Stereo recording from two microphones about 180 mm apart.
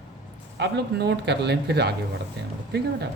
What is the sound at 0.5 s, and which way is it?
Speech, 70° right (ahead or behind).